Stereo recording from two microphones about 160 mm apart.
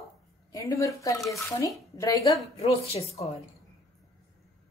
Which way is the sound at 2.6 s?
40° left (ahead or behind).